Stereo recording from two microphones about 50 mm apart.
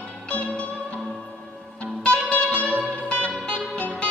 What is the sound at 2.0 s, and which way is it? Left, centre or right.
Music, left.